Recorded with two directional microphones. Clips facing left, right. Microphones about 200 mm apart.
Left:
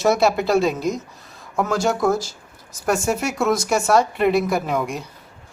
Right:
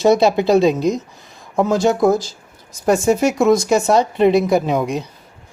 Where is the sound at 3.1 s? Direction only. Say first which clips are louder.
Right 8 dB; centre (ahead or behind).